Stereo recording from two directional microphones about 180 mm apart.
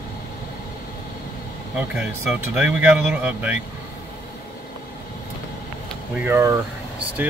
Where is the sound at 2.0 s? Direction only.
5° right (ahead or behind).